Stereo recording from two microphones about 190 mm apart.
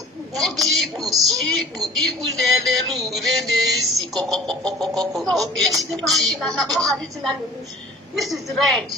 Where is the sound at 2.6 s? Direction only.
Centre (ahead or behind).